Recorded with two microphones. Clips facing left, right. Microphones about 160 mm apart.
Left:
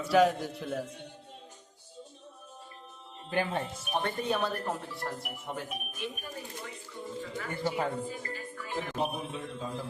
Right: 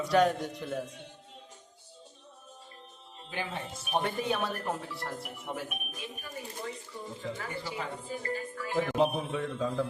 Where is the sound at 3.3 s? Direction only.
50° left (ahead or behind).